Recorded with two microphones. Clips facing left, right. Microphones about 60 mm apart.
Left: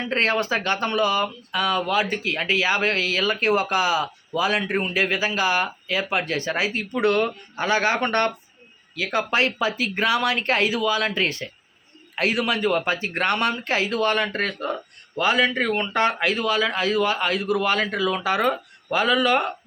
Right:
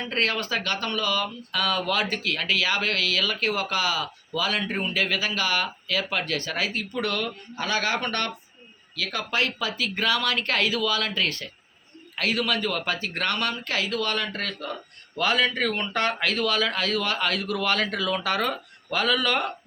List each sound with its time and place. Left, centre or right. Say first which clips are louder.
0.0 s speech: left 4 dB; left
1.5 s speech: left 3 dB; centre; by 15.2 s left
15.2 s speech: left 3 dB; centre